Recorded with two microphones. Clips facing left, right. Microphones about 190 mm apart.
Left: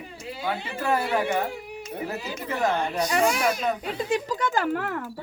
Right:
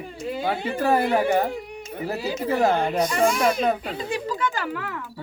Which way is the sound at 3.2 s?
55° right (ahead or behind).